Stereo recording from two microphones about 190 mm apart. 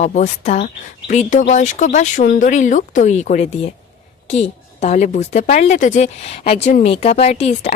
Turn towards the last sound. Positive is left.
turn(degrees=35)  # may be behind; listen again after turning